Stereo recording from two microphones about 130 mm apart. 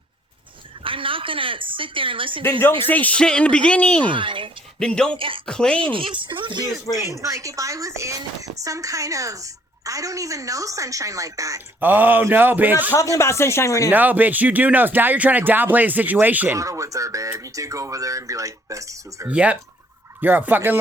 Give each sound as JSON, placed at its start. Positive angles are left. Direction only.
{"t": 0.9, "sound": "speech", "side_deg": -40}
{"t": 2.8, "sound": "speech", "side_deg": 10}
{"t": 4.1, "sound": "speech", "side_deg": -40}
{"t": 4.8, "sound": "speech", "side_deg": 5}
{"t": 5.1, "sound": "speech", "side_deg": -40}
{"t": 5.5, "sound": "speech", "side_deg": 5}
{"t": 5.9, "sound": "speech", "side_deg": -40}
{"t": 7.0, "sound": "a woman's voice", "side_deg": -25}
{"t": 11.8, "sound": "speech", "side_deg": -15}
{"t": 13.1, "sound": "speech", "side_deg": 20}
{"t": 13.9, "sound": "speech", "side_deg": -15}
{"t": 16.6, "sound": "a woman's voice", "side_deg": -25}
{"t": 19.3, "sound": "speech", "side_deg": -10}